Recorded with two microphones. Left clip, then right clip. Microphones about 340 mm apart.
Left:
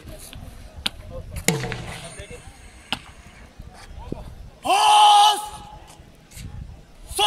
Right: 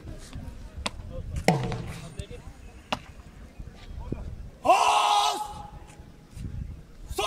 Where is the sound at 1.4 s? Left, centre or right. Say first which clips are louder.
Left 1 dB; right.